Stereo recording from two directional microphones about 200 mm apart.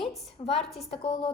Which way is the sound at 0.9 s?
30° left (ahead or behind).